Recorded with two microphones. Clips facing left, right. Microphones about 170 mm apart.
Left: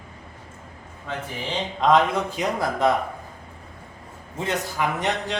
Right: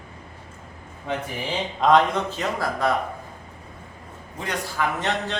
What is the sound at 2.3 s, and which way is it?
Speech, 20° left (ahead or behind).